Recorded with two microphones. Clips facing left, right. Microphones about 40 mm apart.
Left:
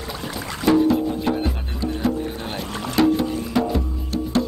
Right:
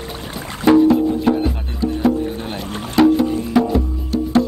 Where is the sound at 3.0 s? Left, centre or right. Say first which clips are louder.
Right 5 dB; centre.